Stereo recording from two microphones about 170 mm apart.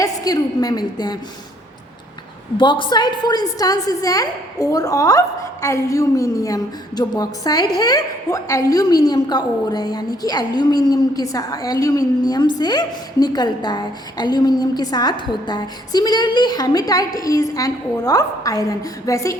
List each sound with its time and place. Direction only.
0.0 s a woman's voice: 20° left (ahead or behind)
2.6 s a woman's voice: 30° left (ahead or behind)